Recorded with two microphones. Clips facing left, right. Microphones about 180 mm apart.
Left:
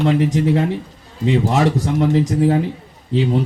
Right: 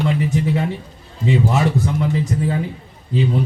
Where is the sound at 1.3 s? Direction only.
90° left.